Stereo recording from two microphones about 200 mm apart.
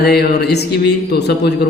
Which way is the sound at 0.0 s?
55° left (ahead or behind).